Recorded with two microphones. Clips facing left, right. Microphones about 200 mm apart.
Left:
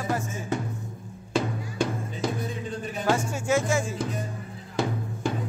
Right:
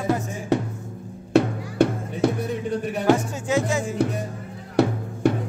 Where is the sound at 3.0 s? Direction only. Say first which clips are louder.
Right 4 dB; 15° right (ahead or behind).